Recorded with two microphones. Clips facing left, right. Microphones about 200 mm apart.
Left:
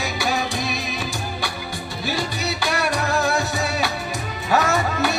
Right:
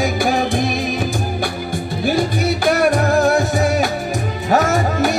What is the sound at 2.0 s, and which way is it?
Music, 50° right (ahead or behind).